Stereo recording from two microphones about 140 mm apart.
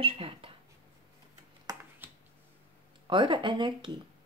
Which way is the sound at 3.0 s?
35° right (ahead or behind).